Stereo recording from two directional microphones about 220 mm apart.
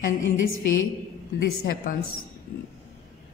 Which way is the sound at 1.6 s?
40° left (ahead or behind).